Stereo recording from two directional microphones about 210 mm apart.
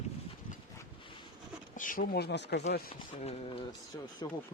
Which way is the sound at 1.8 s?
40° left (ahead or behind).